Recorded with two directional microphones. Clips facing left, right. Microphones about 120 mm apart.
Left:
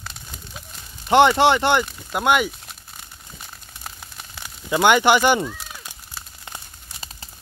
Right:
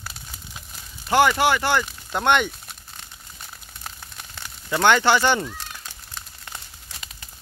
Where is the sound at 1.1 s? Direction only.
25° left (ahead or behind).